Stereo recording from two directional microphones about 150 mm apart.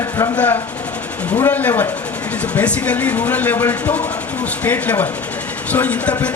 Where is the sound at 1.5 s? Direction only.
10° left (ahead or behind).